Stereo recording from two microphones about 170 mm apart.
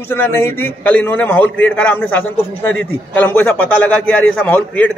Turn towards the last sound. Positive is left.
turn(degrees=10)  # may be behind; listen again after turning